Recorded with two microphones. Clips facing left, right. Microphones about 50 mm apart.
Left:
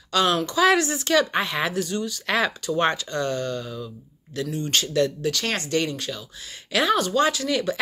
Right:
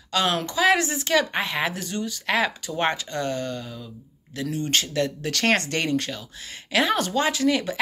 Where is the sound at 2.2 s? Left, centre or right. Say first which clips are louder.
Right 1 dB; centre.